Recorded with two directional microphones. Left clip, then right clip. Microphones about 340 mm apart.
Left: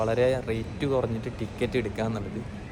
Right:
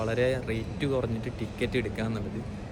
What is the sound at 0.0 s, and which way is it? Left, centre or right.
A man's voice, centre.